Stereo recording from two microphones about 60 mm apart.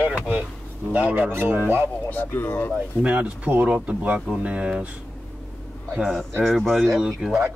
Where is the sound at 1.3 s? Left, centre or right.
Right.